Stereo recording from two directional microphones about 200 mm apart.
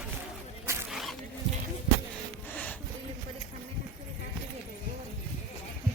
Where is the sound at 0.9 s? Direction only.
Centre (ahead or behind).